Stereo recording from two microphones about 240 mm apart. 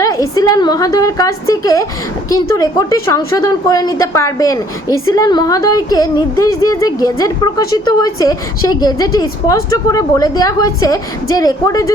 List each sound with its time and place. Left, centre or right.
0.0 s a woman's voice: centre